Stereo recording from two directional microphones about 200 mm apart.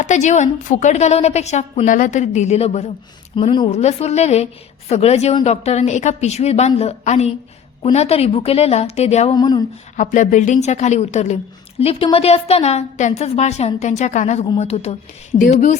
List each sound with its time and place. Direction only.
0.0 s a woman's voice: 35° left (ahead or behind)
9.3 s a woman's voice: 20° left (ahead or behind)
10.0 s a woman's voice: 40° left (ahead or behind)